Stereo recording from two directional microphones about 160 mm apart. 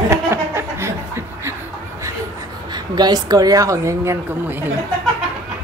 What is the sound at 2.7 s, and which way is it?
A woman's voice, 25° right (ahead or behind).